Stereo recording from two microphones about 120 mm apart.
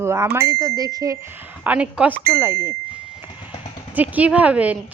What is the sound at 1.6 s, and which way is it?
Speech, 10° right (ahead or behind).